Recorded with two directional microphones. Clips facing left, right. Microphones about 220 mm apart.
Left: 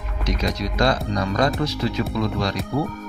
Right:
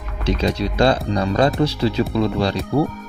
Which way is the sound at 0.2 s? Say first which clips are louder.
Right 5 dB; 30° right (ahead or behind).